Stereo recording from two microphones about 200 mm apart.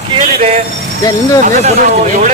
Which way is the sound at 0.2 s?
30° right (ahead or behind).